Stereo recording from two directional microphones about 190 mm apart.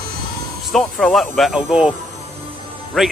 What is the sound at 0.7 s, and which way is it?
Speech, centre (ahead or behind).